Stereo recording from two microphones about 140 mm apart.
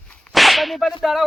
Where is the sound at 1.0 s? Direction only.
Centre (ahead or behind).